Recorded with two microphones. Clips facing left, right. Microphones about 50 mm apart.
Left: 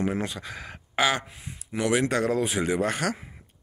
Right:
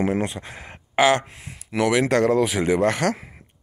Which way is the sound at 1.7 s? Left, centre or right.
Right.